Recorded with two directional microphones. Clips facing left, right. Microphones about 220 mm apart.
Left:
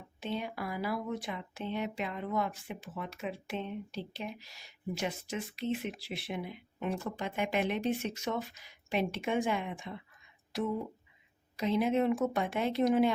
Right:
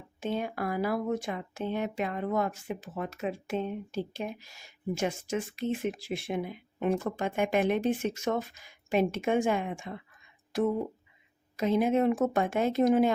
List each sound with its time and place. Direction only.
0.2 s speech: 50° right (ahead or behind)
11.5 s speech: 50° right (ahead or behind)